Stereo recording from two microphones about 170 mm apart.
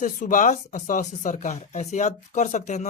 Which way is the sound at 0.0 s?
50° left (ahead or behind).